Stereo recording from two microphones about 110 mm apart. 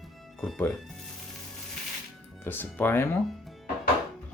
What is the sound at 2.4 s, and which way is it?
Speech, 20° left (ahead or behind).